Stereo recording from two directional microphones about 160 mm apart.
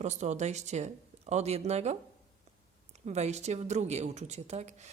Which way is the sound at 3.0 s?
45° right (ahead or behind).